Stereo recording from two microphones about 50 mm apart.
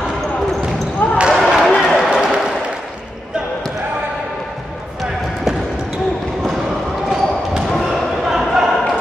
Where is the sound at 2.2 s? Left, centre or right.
Centre.